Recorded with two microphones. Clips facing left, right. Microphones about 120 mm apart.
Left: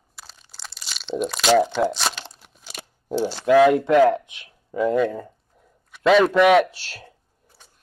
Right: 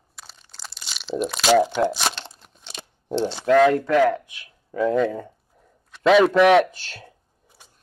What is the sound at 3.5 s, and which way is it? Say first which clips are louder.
Speech: left 2 dB; 10° left (ahead or behind).